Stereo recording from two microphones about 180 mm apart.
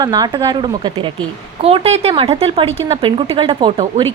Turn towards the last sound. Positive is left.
turn(degrees=-30)  # may be behind; listen again after turning